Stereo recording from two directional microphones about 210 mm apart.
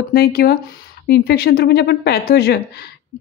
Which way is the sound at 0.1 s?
45° left (ahead or behind).